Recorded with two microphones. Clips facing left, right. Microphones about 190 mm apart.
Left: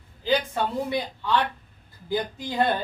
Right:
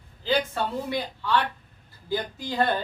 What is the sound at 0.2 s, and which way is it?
Speech, 15° left (ahead or behind).